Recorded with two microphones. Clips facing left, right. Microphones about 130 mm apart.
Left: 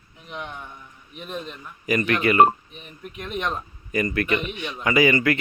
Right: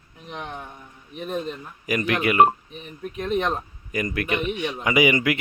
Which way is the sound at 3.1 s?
40° right (ahead or behind).